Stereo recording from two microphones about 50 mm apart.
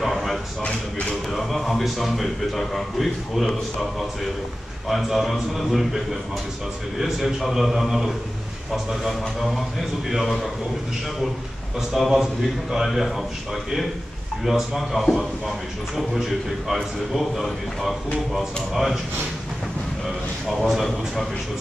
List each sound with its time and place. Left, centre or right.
0.0 s drawer open or close: centre
0.7 s speech: centre
1.3 s a man's voice: centre
4.8 s a man's voice: centre
9.4 s a man's voice: centre
11.9 s a man's voice: centre
14.4 s a man's voice: centre
20.4 s a man's voice: centre